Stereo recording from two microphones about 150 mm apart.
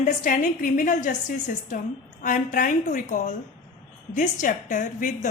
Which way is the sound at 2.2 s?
65° left (ahead or behind).